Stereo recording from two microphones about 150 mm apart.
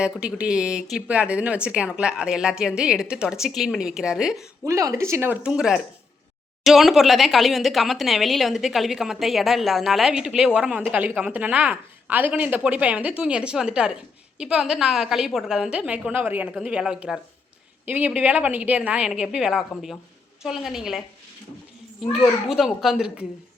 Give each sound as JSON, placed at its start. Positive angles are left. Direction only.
{"t": 0.0, "sound": "speech", "side_deg": -5}
{"t": 4.6, "sound": "a woman's voice", "side_deg": -20}
{"t": 22.1, "sound": "speech", "side_deg": 0}